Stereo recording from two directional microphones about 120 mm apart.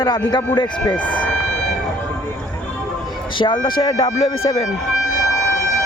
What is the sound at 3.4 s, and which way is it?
Speech, 40° left (ahead or behind).